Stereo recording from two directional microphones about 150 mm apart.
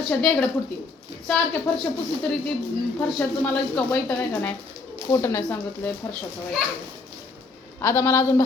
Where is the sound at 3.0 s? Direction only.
5° left (ahead or behind).